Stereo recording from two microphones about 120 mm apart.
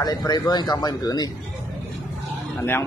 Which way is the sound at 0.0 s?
35° left (ahead or behind).